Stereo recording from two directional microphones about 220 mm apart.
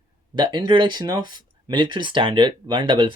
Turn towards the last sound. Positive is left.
turn(degrees=-20)  # may be behind; listen again after turning